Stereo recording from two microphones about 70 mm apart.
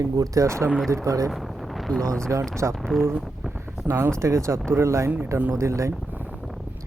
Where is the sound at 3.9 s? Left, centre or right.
Right.